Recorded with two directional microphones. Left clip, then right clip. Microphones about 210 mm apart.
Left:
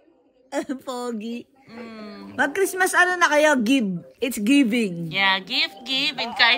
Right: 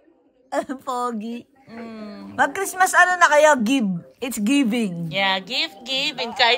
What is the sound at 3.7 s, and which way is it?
Speech, 50° right (ahead or behind).